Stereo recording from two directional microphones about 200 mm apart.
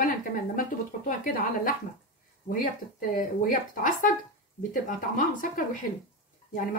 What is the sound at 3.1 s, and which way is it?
Speech, 45° left (ahead or behind).